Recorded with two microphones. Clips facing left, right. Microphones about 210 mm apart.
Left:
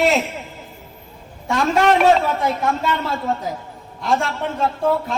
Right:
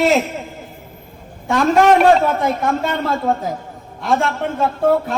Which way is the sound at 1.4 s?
50° right (ahead or behind).